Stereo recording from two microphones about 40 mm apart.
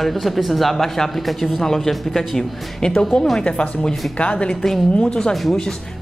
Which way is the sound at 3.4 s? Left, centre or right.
Left.